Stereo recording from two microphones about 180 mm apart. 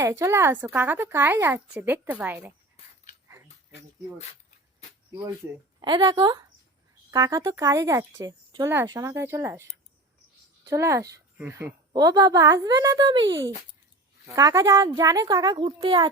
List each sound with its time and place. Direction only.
0.0 s speech: 15° right (ahead or behind)
2.7 s dog: 45° left (ahead or behind)
5.8 s a woman's voice: 25° right (ahead or behind)